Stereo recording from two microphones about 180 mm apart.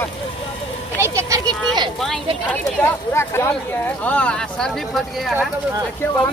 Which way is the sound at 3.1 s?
15° left (ahead or behind).